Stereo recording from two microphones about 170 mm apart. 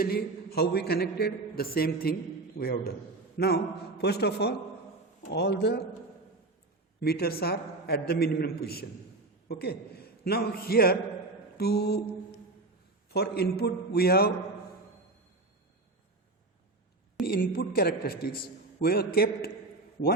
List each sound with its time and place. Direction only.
0.0 s a man's voice: 65° left (ahead or behind)
7.0 s a man's voice: 65° left (ahead or behind)
11.5 s mantra: 65° left (ahead or behind)
13.1 s a man's voice: 70° left (ahead or behind)
17.2 s a man's voice: 60° left (ahead or behind)